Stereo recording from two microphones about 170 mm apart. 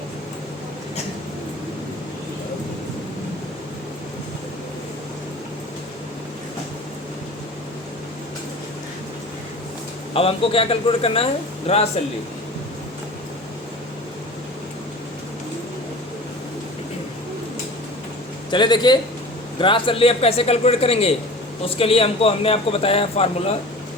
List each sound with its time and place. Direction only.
10.2 s a man's voice: 35° left (ahead or behind)
18.5 s a man's voice: 25° left (ahead or behind)